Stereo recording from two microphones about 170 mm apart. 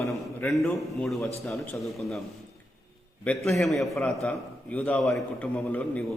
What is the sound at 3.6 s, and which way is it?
A man's voice, centre (ahead or behind).